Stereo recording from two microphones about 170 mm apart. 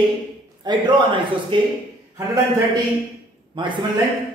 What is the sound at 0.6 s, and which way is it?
Speech, 25° right (ahead or behind).